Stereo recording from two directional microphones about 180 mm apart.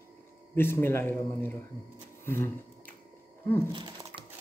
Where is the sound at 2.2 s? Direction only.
15° left (ahead or behind).